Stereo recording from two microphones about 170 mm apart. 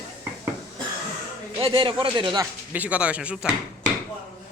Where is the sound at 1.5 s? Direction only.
25° right (ahead or behind).